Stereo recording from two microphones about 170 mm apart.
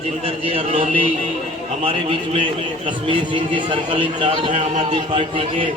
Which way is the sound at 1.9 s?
30° right (ahead or behind).